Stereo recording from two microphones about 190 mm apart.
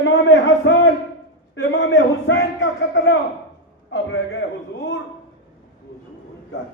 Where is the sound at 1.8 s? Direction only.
75° left (ahead or behind).